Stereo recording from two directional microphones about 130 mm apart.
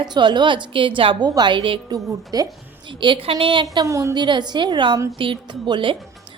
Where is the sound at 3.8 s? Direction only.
25° right (ahead or behind).